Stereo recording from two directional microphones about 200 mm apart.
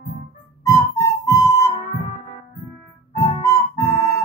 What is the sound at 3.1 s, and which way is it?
Music, 15° left (ahead or behind).